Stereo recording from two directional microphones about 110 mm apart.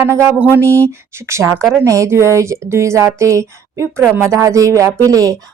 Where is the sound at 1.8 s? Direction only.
30° right (ahead or behind).